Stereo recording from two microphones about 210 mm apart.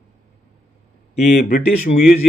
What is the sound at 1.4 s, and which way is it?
Speech, 45° left (ahead or behind).